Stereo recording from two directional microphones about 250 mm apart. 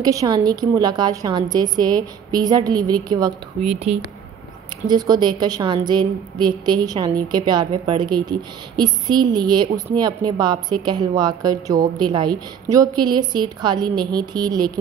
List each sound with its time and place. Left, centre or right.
0.0 s a woman's voice: centre
4.8 s a woman's voice: centre